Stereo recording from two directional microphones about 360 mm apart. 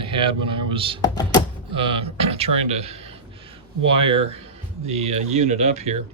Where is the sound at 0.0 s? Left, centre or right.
Centre.